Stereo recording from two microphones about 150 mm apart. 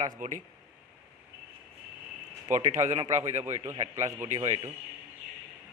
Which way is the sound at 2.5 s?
55° right (ahead or behind).